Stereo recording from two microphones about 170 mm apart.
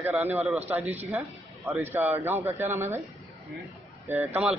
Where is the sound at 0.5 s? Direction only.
10° right (ahead or behind).